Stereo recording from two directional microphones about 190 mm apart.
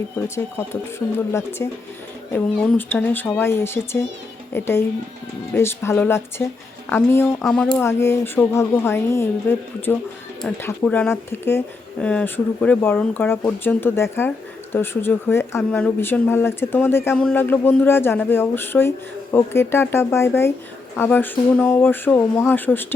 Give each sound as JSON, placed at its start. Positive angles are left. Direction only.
{"t": 0.3, "sound": "speech", "side_deg": 15}